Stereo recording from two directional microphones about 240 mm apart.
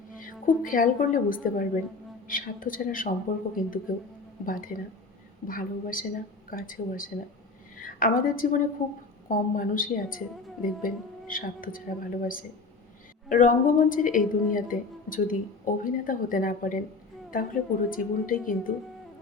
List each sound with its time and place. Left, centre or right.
0.2 s a woman's voice: left